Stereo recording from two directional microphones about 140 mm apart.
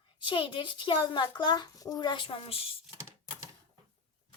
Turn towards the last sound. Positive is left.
turn(degrees=-20)  # may be behind; listen again after turning